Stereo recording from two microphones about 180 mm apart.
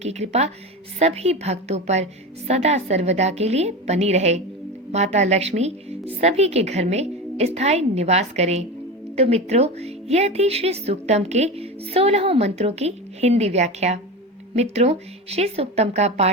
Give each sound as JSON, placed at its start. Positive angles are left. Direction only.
{"t": 0.0, "sound": "a woman's voice", "side_deg": -40}